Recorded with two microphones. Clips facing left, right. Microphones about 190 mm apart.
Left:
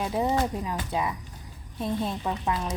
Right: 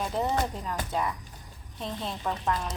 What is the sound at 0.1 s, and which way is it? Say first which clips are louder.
Speech: left 3 dB; 10° left (ahead or behind).